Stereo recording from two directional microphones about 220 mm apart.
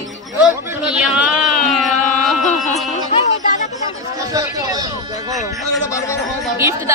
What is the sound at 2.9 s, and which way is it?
Music, 35° left (ahead or behind).